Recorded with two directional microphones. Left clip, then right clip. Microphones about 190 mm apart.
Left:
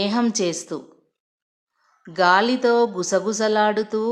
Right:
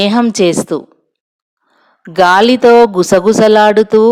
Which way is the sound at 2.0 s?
45° right (ahead or behind).